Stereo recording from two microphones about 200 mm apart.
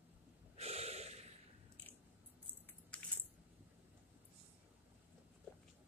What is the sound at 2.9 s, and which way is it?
Coin, 5° left (ahead or behind).